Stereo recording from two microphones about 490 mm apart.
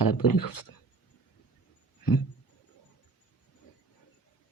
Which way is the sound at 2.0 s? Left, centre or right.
Left.